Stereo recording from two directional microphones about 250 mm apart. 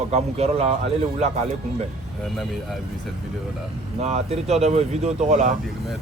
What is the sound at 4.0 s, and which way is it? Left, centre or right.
Speech, right.